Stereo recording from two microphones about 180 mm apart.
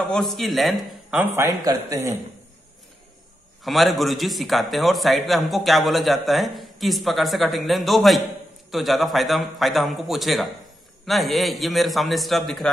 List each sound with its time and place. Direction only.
0.1 s a man's voice: centre (ahead or behind)
1.2 s a man's voice: 15° right (ahead or behind)
3.6 s a man's voice: centre (ahead or behind)